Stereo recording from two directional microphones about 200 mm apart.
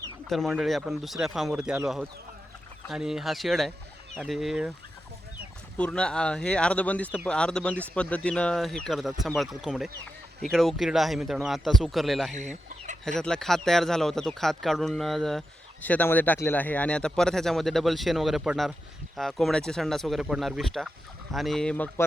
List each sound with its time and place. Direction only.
0.3 s speech: centre (ahead or behind)
5.7 s speech: 5° left (ahead or behind)
12.3 s speech: 35° right (ahead or behind)
13.1 s speech: 5° left (ahead or behind)